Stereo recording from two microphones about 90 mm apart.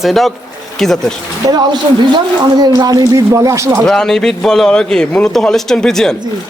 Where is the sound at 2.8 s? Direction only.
45° right (ahead or behind).